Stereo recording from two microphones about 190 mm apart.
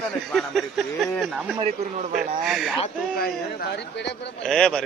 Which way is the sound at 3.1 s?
55° left (ahead or behind).